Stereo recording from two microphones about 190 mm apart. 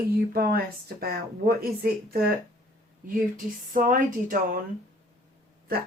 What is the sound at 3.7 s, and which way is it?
Speech, 45° right (ahead or behind).